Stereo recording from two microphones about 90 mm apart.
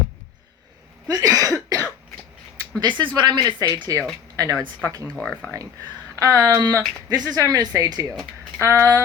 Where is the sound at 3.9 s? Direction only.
40° right (ahead or behind).